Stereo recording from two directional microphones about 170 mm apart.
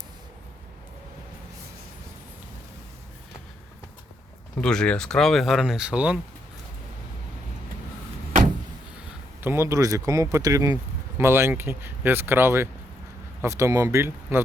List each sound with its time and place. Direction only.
4.6 s speech: 5° left (ahead or behind)
9.4 s speech: 15° right (ahead or behind)